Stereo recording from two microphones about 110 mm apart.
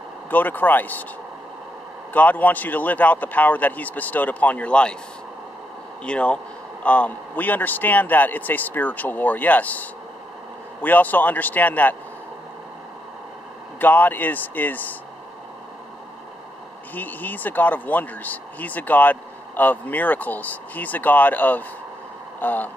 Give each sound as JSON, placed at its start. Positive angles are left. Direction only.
{"t": 0.3, "sound": "speech", "side_deg": 15}
{"t": 2.1, "sound": "speech", "side_deg": 15}
{"t": 6.0, "sound": "speech", "side_deg": 10}
{"t": 13.7, "sound": "speech", "side_deg": 15}
{"t": 16.9, "sound": "speech", "side_deg": 15}